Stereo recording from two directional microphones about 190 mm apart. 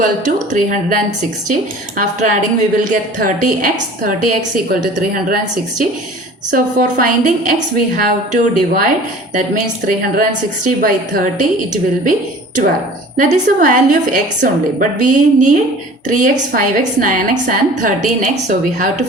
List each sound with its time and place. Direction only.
0.0 s a woman's voice: 40° right (ahead or behind)
13.1 s a woman's voice: 40° right (ahead or behind)